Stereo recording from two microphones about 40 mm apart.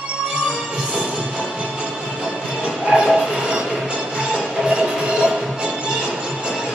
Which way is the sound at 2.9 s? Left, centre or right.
Centre.